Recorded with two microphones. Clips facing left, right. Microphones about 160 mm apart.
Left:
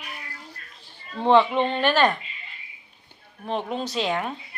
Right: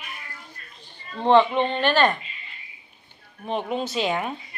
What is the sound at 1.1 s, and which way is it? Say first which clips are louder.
Speech: right 1 dB; 5° left (ahead or behind).